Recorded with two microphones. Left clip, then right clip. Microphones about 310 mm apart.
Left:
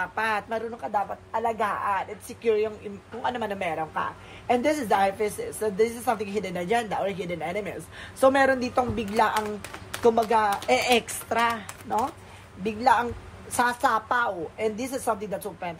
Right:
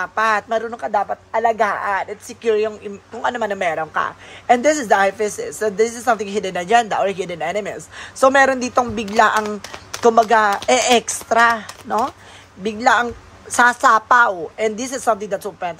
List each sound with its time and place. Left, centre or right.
0.0 s a man's voice: centre